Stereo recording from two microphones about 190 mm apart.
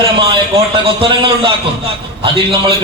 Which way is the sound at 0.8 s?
25° right (ahead or behind).